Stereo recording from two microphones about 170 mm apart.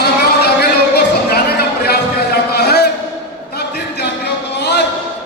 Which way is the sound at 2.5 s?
70° left (ahead or behind).